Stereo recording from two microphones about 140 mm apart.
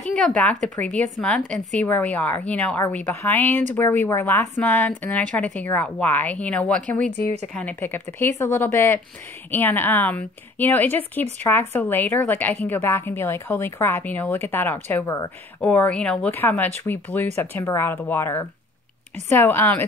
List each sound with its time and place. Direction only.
0.1 s speech: 5° left (ahead or behind); by 15.3 s 20° left (ahead or behind)
15.6 s speech: 10° left (ahead or behind)